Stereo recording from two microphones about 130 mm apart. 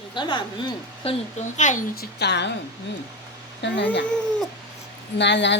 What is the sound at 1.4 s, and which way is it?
Speech, 65° left (ahead or behind).